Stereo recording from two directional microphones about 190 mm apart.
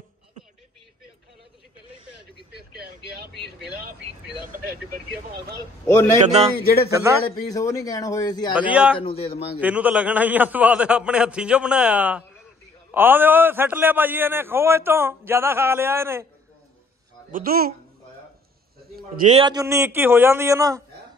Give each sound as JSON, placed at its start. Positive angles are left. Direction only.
{"t": 6.2, "sound": "speech", "side_deg": -35}
{"t": 6.6, "sound": "speech", "side_deg": 55}
{"t": 6.9, "sound": "a man's voice", "side_deg": -15}
{"t": 7.2, "sound": "a man's voice", "side_deg": 20}
{"t": 8.5, "sound": "a man's voice", "side_deg": -5}
{"t": 8.9, "sound": "a man's voice", "side_deg": 30}
{"t": 9.6, "sound": "a man's voice", "side_deg": -10}
{"t": 17.3, "sound": "speech", "side_deg": -50}
{"t": 19.1, "sound": "speech", "side_deg": -40}
{"t": 19.4, "sound": "a man's voice", "side_deg": -20}